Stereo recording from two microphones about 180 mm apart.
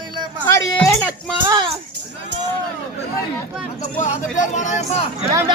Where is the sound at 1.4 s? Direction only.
25° right (ahead or behind).